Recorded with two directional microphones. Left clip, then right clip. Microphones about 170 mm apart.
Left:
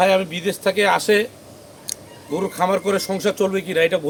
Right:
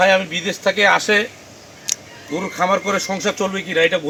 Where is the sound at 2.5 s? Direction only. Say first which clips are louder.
Right 2 dB; 30° left (ahead or behind).